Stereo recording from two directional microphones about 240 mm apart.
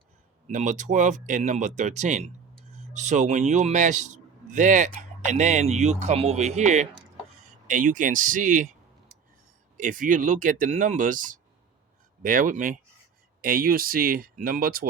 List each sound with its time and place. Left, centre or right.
0.4 s a man's voice: right